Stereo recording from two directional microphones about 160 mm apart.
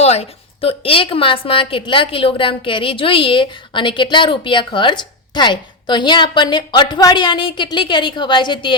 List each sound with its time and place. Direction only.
0.0 s a woman's voice: 40° left (ahead or behind)